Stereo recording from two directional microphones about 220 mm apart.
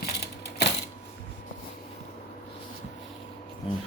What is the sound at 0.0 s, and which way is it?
Typewriter, 50° left (ahead or behind).